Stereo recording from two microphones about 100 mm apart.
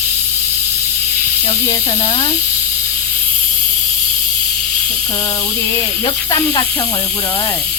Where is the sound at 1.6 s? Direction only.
30° left (ahead or behind).